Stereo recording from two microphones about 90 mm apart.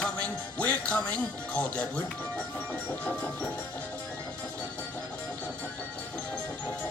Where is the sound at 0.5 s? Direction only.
15° left (ahead or behind).